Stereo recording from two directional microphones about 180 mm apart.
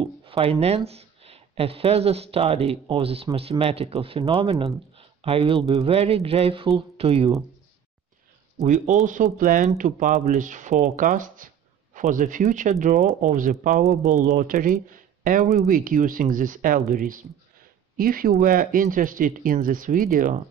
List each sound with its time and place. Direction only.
0.0 s speech: 30° right (ahead or behind)
8.5 s speech: 45° right (ahead or behind)